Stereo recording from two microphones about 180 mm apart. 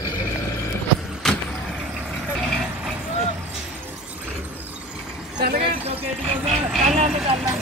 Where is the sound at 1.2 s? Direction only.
5° left (ahead or behind).